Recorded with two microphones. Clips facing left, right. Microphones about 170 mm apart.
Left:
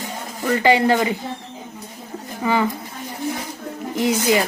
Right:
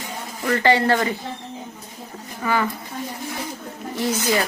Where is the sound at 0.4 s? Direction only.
15° left (ahead or behind).